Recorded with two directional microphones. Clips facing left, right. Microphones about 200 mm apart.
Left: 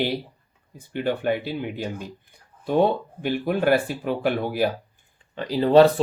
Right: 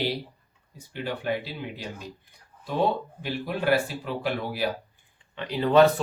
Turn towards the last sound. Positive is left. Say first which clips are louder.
# left 4 dB
turn(degrees=35)  # may be behind; listen again after turning